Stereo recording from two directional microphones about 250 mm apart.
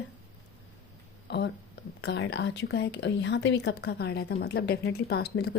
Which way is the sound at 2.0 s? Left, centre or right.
Left.